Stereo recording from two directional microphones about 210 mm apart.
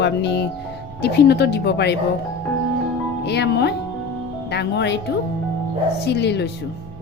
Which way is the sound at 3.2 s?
55° left (ahead or behind).